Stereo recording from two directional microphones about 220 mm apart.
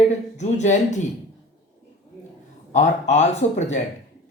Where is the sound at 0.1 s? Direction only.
30° left (ahead or behind).